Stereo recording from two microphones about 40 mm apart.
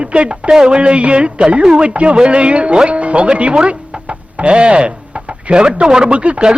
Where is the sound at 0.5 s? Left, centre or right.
Centre.